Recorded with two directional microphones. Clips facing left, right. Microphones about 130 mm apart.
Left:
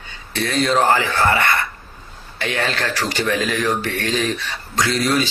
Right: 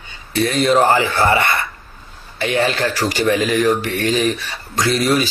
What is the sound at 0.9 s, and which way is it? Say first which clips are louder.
Speech: right 2 dB; 15° right (ahead or behind).